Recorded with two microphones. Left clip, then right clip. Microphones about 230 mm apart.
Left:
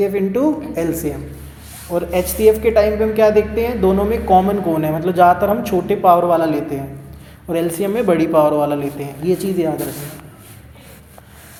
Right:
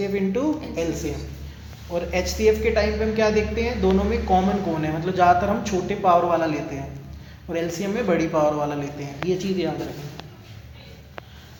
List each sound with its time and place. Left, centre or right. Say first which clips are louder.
0.0 s a woman's voice: left 7 dB; left